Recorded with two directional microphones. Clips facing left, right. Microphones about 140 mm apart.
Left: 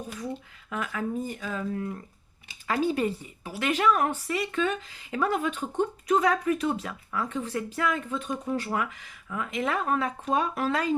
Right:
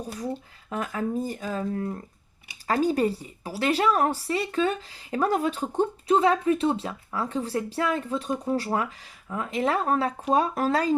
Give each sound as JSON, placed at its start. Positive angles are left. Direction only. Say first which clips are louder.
{"t": 0.7, "sound": "speech", "louder": "right 3 dB", "side_deg": -35}